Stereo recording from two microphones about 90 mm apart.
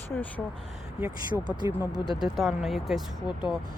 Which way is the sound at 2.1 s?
Centre (ahead or behind).